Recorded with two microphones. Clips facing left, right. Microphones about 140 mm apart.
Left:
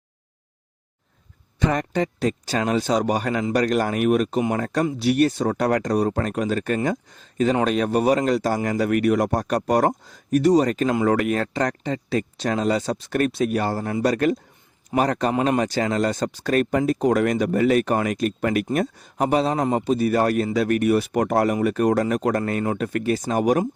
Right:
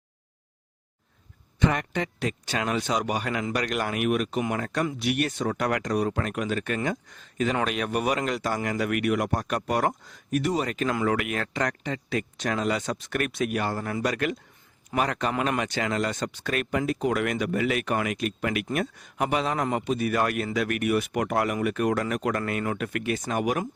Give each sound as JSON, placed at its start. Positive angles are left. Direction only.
{"t": 1.5, "sound": "a man's voice", "side_deg": 35}